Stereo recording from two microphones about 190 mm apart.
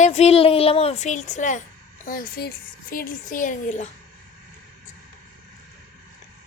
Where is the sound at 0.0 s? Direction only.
35° left (ahead or behind).